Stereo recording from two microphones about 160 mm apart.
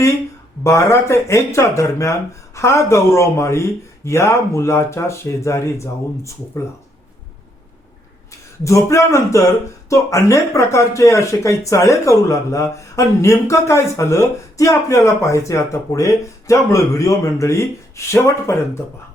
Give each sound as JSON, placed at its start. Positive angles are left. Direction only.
{"t": 0.6, "sound": "speech", "side_deg": 20}
{"t": 8.6, "sound": "speech", "side_deg": 20}